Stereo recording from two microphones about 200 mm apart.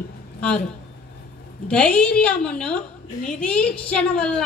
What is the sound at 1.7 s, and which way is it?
A woman's voice, 5° left (ahead or behind).